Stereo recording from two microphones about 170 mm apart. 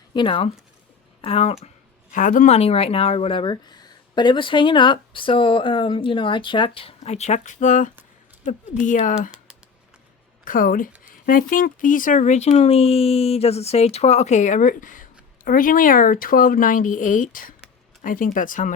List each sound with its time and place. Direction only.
0.1 s speech: 30° left (ahead or behind)
2.1 s speech: 50° left (ahead or behind)
10.4 s speech: 55° left (ahead or behind)